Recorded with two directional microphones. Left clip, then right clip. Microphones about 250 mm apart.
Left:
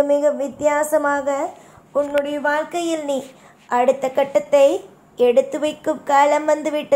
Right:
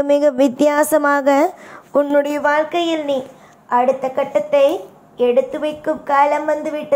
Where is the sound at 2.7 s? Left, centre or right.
Centre.